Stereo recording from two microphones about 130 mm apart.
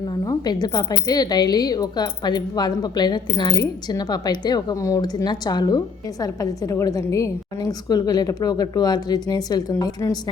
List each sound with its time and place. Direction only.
0.3 s a woman's voice: 30° left (ahead or behind)